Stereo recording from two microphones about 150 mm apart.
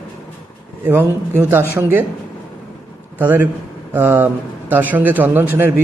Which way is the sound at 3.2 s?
10° right (ahead or behind).